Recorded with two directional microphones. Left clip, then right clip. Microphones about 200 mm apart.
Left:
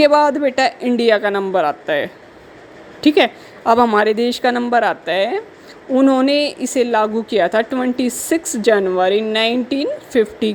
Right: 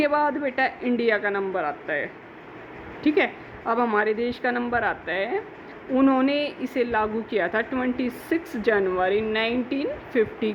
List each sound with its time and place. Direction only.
0.0 s a woman's voice: 55° left (ahead or behind)